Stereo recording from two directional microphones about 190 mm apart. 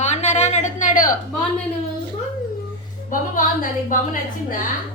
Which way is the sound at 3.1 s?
45° left (ahead or behind).